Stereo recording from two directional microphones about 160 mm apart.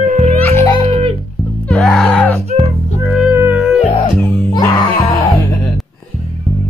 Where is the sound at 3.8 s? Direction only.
40° left (ahead or behind).